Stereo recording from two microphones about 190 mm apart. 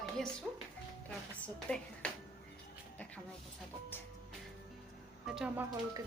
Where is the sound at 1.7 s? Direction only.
5° left (ahead or behind).